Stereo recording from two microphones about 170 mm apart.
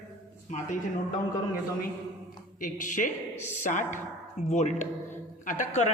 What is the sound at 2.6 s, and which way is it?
A man's voice, 50° left (ahead or behind).